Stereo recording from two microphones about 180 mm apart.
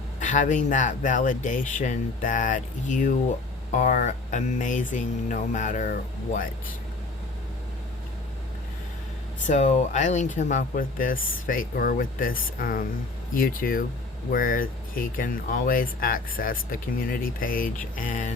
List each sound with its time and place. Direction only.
0.2 s speech: 45° left (ahead or behind)
9.5 s speech: 40° left (ahead or behind)